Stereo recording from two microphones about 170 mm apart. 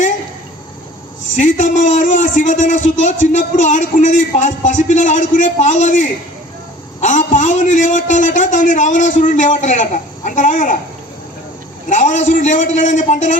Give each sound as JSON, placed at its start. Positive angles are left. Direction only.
{"t": 1.4, "sound": "a man's voice", "side_deg": 45}
{"t": 11.9, "sound": "a man's voice", "side_deg": 45}